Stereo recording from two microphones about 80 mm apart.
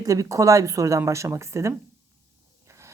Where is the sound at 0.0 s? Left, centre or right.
Right.